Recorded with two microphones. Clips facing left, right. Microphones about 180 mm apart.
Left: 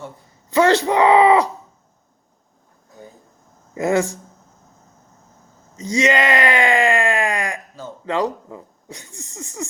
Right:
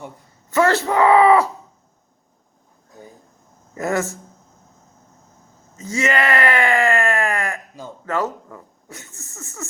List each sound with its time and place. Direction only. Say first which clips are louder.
0.5 s speech: left 2 dB; 15° left (ahead or behind)
3.8 s speech: left 4 dB; 15° left (ahead or behind)
5.7 s speech: left 3 dB; 15° left (ahead or behind)